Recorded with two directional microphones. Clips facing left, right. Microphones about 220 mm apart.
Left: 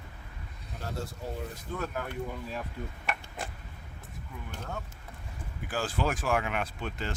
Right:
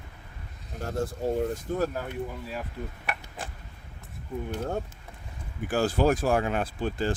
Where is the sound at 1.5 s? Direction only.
35° right (ahead or behind).